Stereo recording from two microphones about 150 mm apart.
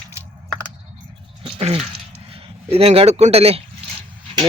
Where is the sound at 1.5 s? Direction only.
35° right (ahead or behind).